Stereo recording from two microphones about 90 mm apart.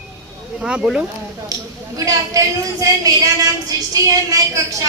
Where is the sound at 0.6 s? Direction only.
5° right (ahead or behind).